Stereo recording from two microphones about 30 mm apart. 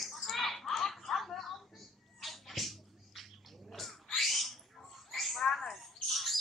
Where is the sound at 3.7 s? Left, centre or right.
Centre.